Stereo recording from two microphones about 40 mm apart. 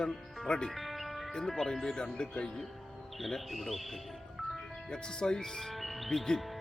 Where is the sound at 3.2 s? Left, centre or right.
Centre.